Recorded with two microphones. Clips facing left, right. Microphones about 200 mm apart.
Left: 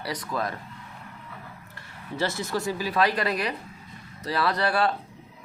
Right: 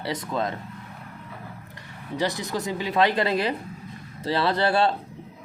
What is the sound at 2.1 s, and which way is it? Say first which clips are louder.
Speech: right 1 dB; 15° right (ahead or behind).